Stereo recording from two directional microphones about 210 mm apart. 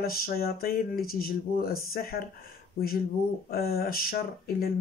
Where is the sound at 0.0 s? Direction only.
45° left (ahead or behind).